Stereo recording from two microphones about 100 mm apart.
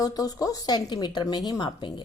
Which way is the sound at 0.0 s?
40° left (ahead or behind).